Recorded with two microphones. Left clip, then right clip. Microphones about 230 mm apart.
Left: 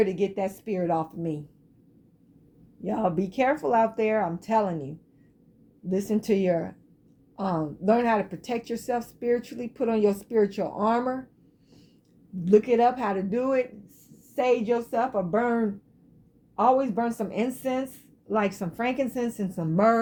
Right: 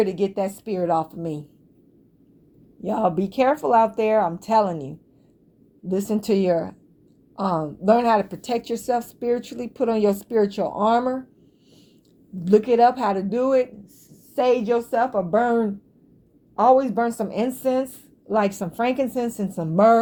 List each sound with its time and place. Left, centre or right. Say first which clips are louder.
0.0 s a woman's voice: right 3 dB; right
2.8 s a woman's voice: right 5 dB; right
12.5 s a woman's voice: right 4 dB; right